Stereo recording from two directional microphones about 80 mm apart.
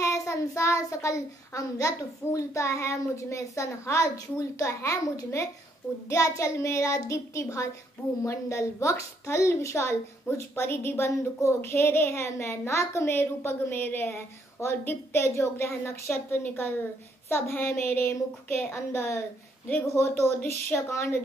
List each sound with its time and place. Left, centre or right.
0.0 s a child's voice: left